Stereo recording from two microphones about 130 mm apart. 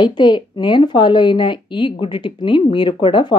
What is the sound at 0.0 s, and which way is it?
A woman's voice, 35° left (ahead or behind).